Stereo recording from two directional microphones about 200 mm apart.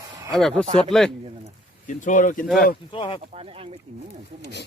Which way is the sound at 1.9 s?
40° left (ahead or behind).